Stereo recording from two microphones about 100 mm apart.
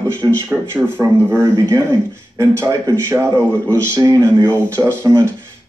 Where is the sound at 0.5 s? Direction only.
25° right (ahead or behind).